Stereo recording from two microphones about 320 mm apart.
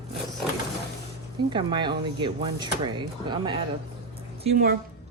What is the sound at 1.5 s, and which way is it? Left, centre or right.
Speech, centre.